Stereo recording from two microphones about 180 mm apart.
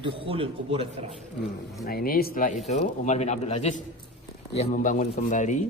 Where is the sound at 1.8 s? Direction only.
55° left (ahead or behind).